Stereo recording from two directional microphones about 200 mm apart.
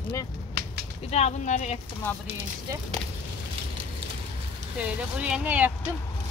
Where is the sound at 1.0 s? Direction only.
35° left (ahead or behind).